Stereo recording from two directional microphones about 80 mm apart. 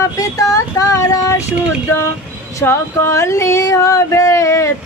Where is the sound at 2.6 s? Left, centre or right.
Left.